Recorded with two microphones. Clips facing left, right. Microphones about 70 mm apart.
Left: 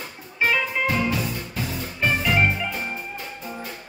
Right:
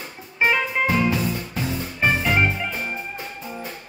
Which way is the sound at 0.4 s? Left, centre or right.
Right.